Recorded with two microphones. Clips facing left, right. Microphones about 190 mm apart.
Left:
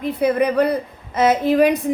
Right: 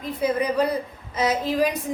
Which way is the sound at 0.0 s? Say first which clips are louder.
Left 6 dB; 60° left (ahead or behind).